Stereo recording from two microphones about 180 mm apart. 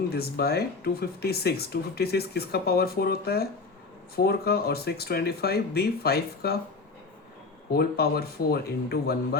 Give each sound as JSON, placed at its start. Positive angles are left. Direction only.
{"t": 0.1, "sound": "speech", "side_deg": 60}
{"t": 7.7, "sound": "speech", "side_deg": 60}